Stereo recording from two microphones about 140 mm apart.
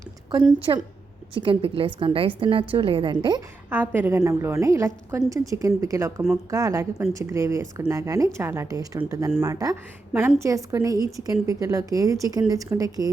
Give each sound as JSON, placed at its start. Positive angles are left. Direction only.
{"t": 0.7, "sound": "a woman's voice", "side_deg": -30}
{"t": 3.7, "sound": "a woman's voice", "side_deg": -15}